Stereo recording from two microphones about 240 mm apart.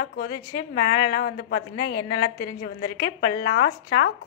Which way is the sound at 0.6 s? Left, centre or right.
Left.